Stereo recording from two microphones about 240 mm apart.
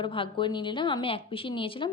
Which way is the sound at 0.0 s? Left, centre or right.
Left.